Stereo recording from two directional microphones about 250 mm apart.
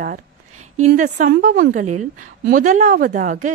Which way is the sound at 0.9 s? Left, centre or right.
Right.